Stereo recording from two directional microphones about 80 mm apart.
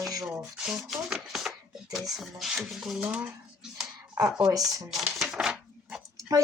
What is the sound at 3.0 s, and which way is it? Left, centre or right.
Speech, centre.